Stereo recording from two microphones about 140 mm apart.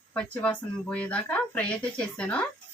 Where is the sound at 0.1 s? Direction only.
10° left (ahead or behind).